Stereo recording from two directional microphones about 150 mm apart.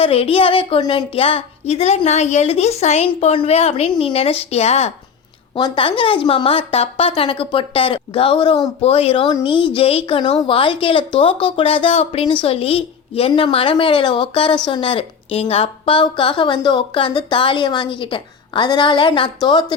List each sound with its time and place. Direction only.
0.0 s a woman's voice: 40° left (ahead or behind)
5.5 s a woman's voice: 30° left (ahead or behind)